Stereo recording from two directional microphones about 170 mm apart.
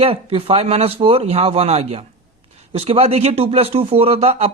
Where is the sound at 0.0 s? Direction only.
35° right (ahead or behind).